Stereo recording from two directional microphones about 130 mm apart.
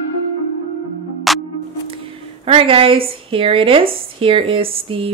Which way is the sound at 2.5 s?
45° right (ahead or behind).